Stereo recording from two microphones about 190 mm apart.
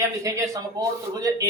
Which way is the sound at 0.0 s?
15° right (ahead or behind).